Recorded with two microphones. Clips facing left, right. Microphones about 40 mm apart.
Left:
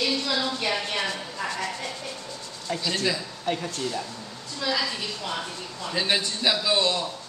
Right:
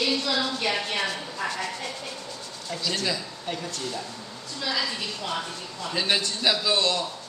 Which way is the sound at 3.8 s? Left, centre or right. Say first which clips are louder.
Left 3 dB; centre.